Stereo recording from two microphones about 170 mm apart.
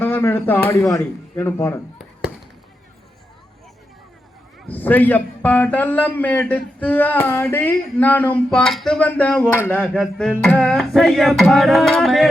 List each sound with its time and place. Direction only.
0.0 s a man's voice: 10° left (ahead or behind)
4.7 s a man's voice: 10° left (ahead or behind)
9.9 s a sound: centre (ahead or behind)